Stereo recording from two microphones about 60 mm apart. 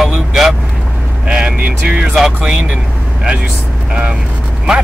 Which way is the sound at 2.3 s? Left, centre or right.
Centre.